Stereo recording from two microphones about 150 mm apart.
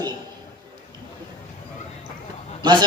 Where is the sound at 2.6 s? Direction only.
30° right (ahead or behind).